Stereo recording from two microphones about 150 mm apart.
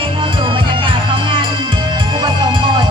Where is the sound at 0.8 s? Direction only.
30° right (ahead or behind).